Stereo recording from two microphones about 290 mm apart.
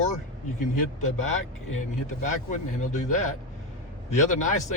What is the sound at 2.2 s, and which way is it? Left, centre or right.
Speech, left.